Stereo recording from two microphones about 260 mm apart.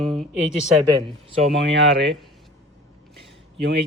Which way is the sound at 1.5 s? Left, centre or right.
Right.